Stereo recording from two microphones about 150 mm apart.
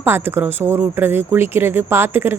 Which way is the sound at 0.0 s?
15° right (ahead or behind).